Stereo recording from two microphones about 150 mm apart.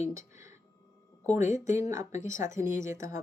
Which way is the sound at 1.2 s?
55° left (ahead or behind).